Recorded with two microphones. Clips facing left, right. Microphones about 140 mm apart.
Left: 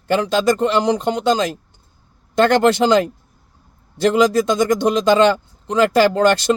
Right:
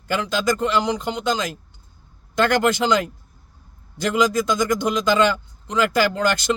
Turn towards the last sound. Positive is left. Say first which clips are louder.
# left 6 dB
turn(degrees=30)  # may be behind; listen again after turning